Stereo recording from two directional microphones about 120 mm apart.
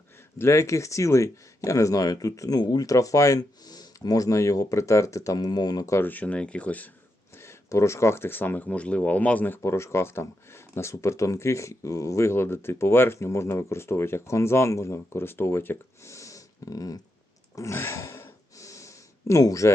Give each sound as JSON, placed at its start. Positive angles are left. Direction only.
{"t": 0.3, "sound": "speech", "side_deg": 25}
{"t": 7.4, "sound": "speech", "side_deg": 25}
{"t": 17.5, "sound": "a sound", "side_deg": 25}